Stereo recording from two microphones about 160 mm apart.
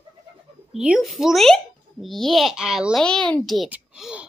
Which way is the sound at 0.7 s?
5° right (ahead or behind).